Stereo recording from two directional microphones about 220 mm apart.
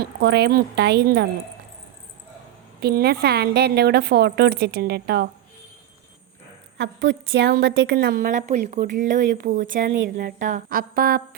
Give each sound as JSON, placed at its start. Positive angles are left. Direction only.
{"t": 0.0, "sound": "a woman's voice", "side_deg": -50}
{"t": 2.8, "sound": "a woman's voice", "side_deg": -45}
{"t": 6.7, "sound": "a woman's voice", "side_deg": -55}